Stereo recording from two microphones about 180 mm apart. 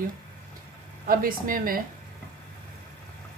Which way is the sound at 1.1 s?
50° right (ahead or behind).